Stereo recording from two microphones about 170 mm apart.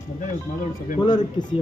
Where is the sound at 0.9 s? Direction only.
25° left (ahead or behind).